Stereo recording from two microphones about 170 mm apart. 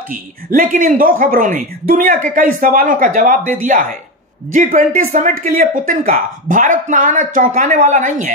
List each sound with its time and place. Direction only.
0.1 s speech: 55° right (ahead or behind)